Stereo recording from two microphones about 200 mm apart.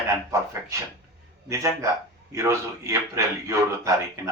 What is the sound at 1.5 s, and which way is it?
A man's voice, 15° right (ahead or behind).